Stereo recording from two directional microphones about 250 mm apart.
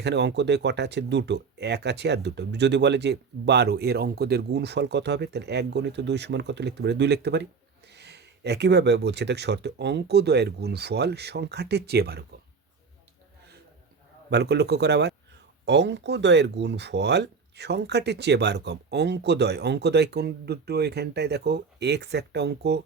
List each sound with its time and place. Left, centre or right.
0.0 s speech: right
14.3 s speech: right